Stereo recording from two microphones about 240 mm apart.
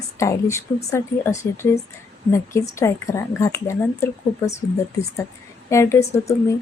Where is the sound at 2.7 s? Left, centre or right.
Centre.